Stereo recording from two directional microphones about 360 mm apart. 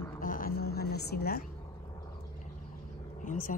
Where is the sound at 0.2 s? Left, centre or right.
Left.